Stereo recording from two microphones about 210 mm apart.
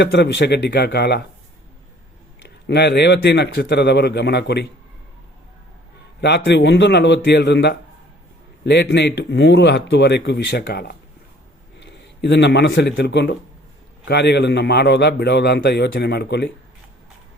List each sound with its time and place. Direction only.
0.0 s a man's voice: 55° left (ahead or behind)
2.4 s a man's voice: 55° left (ahead or behind)
6.1 s a man's voice: 55° left (ahead or behind)